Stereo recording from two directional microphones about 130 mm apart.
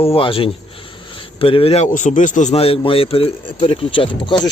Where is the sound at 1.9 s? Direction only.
75° left (ahead or behind); by 4.5 s 35° left (ahead or behind).